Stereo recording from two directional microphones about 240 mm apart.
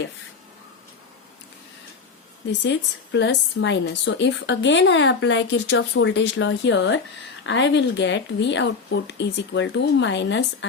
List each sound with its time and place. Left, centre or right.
2.5 s a woman's voice: left